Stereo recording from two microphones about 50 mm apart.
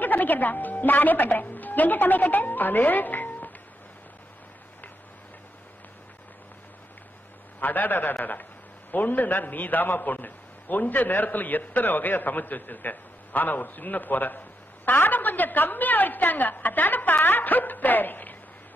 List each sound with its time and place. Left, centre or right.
0.0 s a woman's voice: left
7.6 s a man's voice: left